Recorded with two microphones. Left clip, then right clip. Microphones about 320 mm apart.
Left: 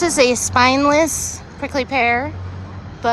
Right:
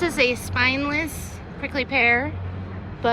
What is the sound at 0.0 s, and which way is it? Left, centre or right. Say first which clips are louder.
Speech: left 6 dB; centre.